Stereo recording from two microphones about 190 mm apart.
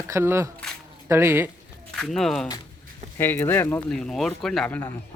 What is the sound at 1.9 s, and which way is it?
Speech, centre (ahead or behind).